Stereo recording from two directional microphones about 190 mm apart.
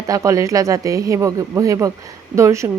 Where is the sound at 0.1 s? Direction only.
15° right (ahead or behind).